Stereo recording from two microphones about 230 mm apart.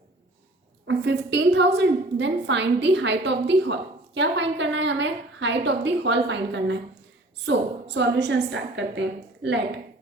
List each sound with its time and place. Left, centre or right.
0.9 s a woman's voice: right